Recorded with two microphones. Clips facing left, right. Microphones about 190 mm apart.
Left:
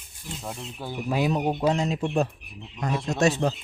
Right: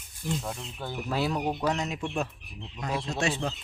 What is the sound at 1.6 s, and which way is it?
Speech, 30° left (ahead or behind).